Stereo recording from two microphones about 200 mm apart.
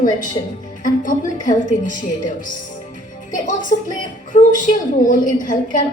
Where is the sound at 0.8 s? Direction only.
40° left (ahead or behind).